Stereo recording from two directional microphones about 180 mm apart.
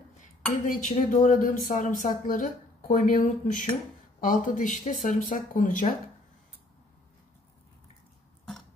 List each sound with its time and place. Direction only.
0.2 s speech: 45° left (ahead or behind)